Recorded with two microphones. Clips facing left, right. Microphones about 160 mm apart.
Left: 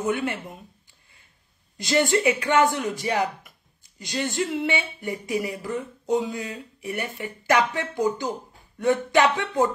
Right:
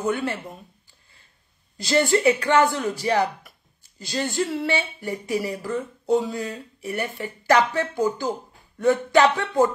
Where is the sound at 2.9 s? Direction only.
15° left (ahead or behind).